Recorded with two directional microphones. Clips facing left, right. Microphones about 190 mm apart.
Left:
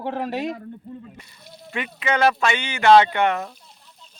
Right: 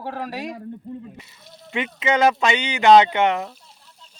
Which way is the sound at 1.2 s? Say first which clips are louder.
Even; 5° right (ahead or behind).